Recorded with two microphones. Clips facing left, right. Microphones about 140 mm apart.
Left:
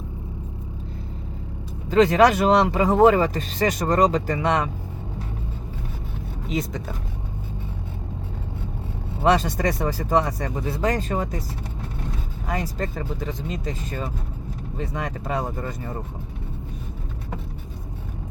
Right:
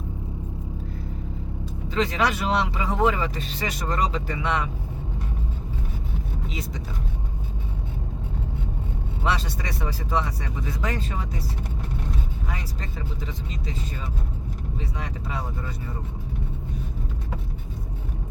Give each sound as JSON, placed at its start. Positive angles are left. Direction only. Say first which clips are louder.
{"t": 1.9, "sound": "speech", "louder": "left 8 dB", "side_deg": 45}
{"t": 9.2, "sound": "speech", "louder": "left 9 dB", "side_deg": 45}
{"t": 12.5, "sound": "speech", "louder": "left 8 dB", "side_deg": 50}